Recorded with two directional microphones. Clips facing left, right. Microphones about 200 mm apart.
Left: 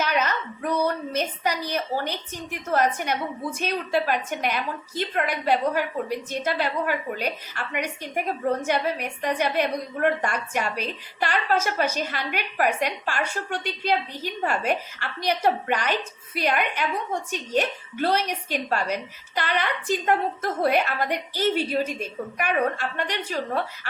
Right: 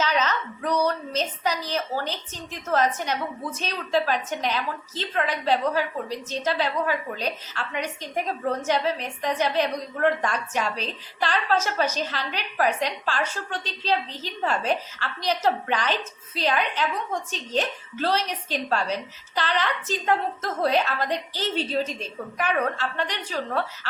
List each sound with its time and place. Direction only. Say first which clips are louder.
0.0 s a woman's voice: even; 10° left (ahead or behind)